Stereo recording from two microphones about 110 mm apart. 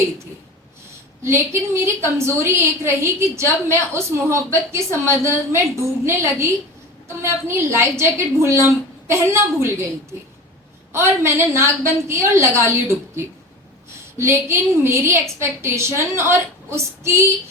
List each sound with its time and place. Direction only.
1.2 s a woman's voice: 25° right (ahead or behind)
10.9 s a woman's voice: 25° right (ahead or behind)